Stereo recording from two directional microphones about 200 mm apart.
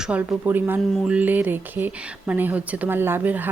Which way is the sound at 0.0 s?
5° right (ahead or behind).